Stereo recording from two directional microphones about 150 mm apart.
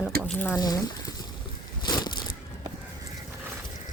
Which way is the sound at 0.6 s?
25° left (ahead or behind).